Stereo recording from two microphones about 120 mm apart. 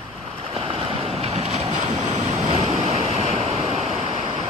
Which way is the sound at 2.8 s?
60° right (ahead or behind).